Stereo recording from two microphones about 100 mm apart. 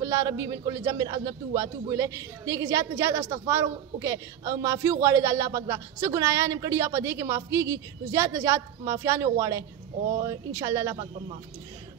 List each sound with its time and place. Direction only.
0.0 s a man's voice: 30° right (ahead or behind)